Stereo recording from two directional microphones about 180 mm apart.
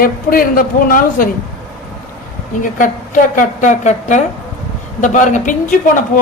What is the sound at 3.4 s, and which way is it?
Speech, 45° left (ahead or behind).